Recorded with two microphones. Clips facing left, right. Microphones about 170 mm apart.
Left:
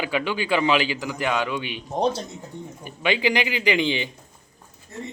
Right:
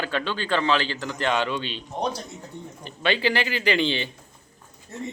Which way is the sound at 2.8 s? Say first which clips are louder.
Left 1 dB; 15° left (ahead or behind).